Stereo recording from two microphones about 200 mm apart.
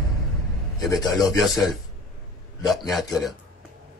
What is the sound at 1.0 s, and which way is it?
Speech, centre (ahead or behind).